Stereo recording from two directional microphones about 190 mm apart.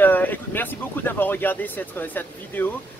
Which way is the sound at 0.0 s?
10° left (ahead or behind).